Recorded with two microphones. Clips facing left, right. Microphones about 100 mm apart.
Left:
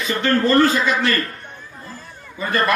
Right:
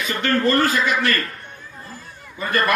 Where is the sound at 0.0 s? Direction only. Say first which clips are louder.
Left 1 dB; 30° left (ahead or behind).